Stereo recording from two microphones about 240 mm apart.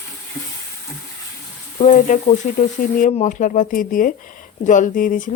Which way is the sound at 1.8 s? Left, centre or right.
Left.